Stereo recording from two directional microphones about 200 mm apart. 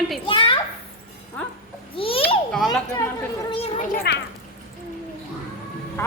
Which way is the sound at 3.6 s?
30° left (ahead or behind).